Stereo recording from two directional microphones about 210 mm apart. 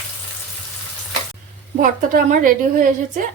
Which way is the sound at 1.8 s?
40° right (ahead or behind).